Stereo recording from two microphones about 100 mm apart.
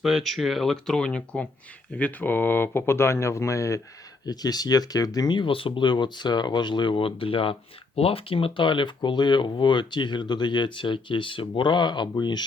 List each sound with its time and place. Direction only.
0.0 s speech: centre (ahead or behind); by 12.5 s 45° left (ahead or behind)